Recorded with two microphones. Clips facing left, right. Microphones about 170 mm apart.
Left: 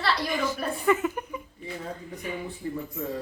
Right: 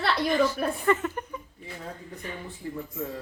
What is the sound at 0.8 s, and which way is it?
Speech, 5° left (ahead or behind).